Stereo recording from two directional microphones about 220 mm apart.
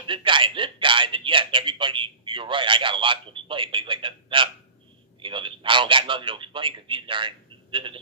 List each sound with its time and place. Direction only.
0.0 s a man's voice: 20° right (ahead or behind)